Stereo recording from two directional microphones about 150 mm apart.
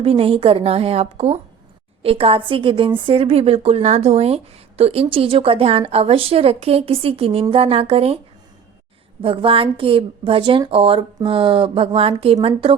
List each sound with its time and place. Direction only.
0.0 s speech: 40° right (ahead or behind)
9.2 s speech: 35° right (ahead or behind)